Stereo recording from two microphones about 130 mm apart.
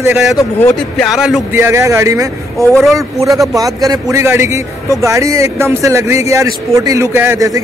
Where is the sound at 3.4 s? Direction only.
25° right (ahead or behind).